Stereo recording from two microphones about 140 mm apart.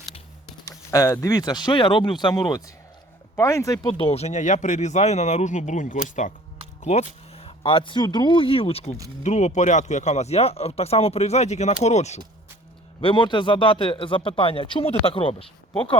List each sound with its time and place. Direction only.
0.6 s speech: 20° left (ahead or behind)
3.8 s speech: 40° left (ahead or behind); by 6.3 s 65° left (ahead or behind)
6.8 s speech: 50° left (ahead or behind)
13.0 s speech: 35° left (ahead or behind)